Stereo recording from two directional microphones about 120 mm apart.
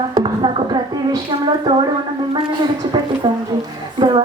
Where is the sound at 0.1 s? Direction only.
40° right (ahead or behind).